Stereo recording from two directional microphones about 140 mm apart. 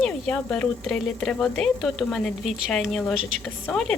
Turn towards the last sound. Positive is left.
turn(degrees=5)  # may be behind; listen again after turning